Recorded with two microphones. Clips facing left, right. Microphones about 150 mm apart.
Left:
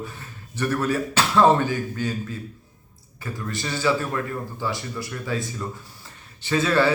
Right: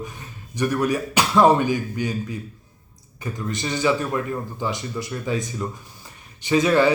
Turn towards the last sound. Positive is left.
turn(degrees=-15)  # may be behind; listen again after turning